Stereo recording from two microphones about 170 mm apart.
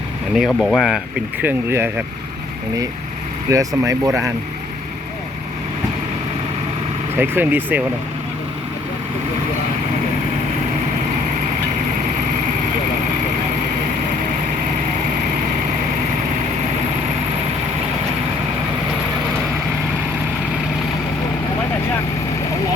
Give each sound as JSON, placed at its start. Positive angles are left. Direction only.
{"t": 0.3, "sound": "speech", "side_deg": 0}
{"t": 3.5, "sound": "speech", "side_deg": -20}
{"t": 7.2, "sound": "speech", "side_deg": -10}